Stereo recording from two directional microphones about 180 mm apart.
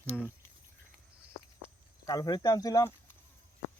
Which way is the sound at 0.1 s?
Centre (ahead or behind).